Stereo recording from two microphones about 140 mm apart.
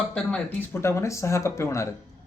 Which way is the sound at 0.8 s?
20° left (ahead or behind).